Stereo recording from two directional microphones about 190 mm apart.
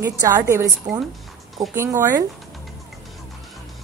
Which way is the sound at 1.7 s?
15° right (ahead or behind).